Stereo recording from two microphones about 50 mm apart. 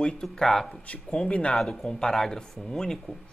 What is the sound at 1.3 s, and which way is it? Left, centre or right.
Speech, left.